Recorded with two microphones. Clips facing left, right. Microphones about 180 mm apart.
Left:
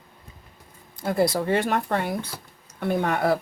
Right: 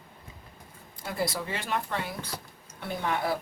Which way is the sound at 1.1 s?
50° left (ahead or behind).